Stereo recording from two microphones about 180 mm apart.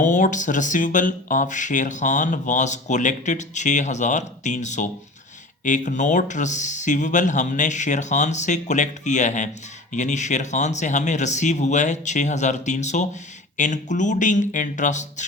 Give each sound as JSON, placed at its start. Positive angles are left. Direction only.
{"t": 0.0, "sound": "speech", "side_deg": 45}